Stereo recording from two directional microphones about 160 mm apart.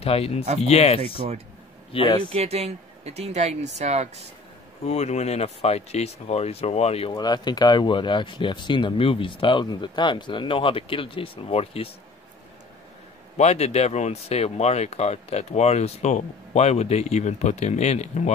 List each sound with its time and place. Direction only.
0.0 s speech: 40° left (ahead or behind)
1.1 s speech: 35° right (ahead or behind)
1.9 s speech: 30° left (ahead or behind)
2.2 s speech: 40° right (ahead or behind)
4.8 s speech: 45° left (ahead or behind)
7.2 s speech: 25° left (ahead or behind)
13.4 s speech: 40° left (ahead or behind)